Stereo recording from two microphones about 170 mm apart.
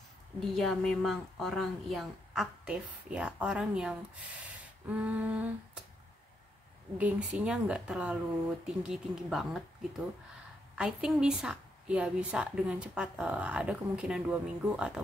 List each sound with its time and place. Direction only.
0.6 s a woman's voice: centre (ahead or behind)
7.0 s a woman's voice: 10° right (ahead or behind)